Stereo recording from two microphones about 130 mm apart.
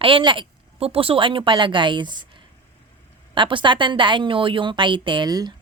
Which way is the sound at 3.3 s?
40° right (ahead or behind).